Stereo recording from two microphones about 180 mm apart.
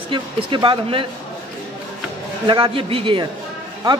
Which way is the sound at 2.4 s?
25° right (ahead or behind).